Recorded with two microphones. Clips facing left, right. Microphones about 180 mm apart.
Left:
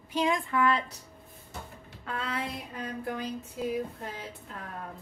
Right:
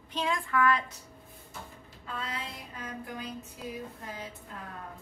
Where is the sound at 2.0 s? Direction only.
70° left (ahead or behind).